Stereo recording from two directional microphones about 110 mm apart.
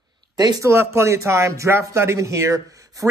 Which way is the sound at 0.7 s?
25° right (ahead or behind).